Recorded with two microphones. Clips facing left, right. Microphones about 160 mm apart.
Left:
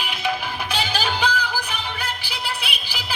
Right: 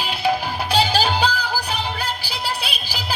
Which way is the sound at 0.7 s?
35° right (ahead or behind).